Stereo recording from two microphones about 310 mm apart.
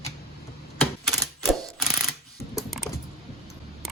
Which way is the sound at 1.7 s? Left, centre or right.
Centre.